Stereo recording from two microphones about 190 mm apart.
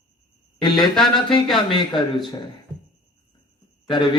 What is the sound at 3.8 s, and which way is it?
Speech, 25° left (ahead or behind).